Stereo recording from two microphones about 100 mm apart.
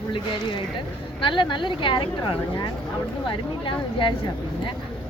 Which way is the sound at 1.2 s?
55° left (ahead or behind).